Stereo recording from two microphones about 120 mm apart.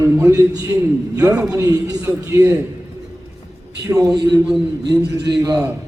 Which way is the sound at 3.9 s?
25° right (ahead or behind).